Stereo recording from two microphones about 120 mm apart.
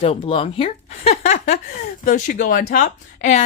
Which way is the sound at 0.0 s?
55° left (ahead or behind).